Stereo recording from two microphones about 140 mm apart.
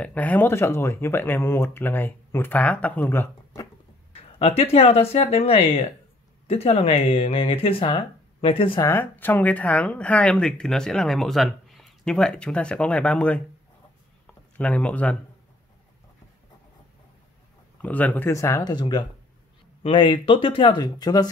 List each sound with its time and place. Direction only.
0.0 s speech: 10° left (ahead or behind)
4.1 s speech: 45° left (ahead or behind)
8.8 s speech: 15° left (ahead or behind)
14.2 s a sound: 10° left (ahead or behind)
17.8 s speech: 10° left (ahead or behind); by 21.3 s 30° left (ahead or behind)